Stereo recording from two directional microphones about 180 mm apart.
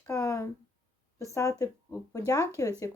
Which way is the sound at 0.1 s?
15° left (ahead or behind).